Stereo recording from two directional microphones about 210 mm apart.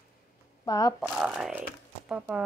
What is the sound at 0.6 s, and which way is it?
Speech, 15° left (ahead or behind).